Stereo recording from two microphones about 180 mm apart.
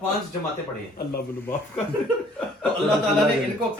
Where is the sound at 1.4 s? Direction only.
10° left (ahead or behind).